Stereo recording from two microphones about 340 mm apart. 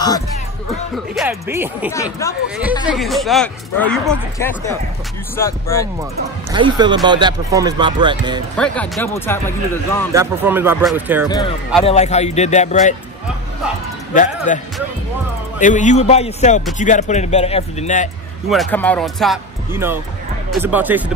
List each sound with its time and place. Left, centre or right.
0.9 s speech: centre
6.5 s speech: centre
8.5 s speech: centre
10.1 s speech: centre
11.2 s speech: centre
14.1 s speech: left
15.6 s speech: left
18.5 s speech: centre